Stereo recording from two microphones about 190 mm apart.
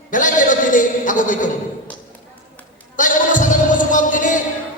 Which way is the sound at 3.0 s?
45° left (ahead or behind).